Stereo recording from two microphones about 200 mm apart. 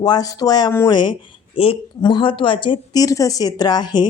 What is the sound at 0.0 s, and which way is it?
Speech, 20° left (ahead or behind).